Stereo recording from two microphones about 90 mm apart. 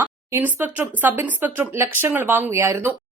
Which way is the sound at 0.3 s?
20° right (ahead or behind).